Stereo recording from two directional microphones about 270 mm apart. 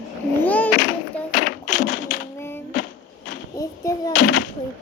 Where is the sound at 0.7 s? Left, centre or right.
Left.